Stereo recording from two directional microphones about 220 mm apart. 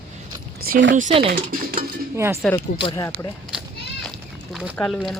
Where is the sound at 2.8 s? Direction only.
20° left (ahead or behind).